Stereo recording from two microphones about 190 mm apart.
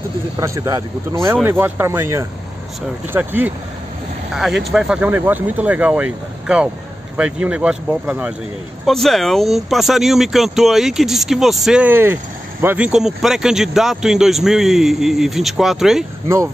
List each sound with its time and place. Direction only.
0.4 s speech: 15° right (ahead or behind)
4.6 s speech: 5° right (ahead or behind)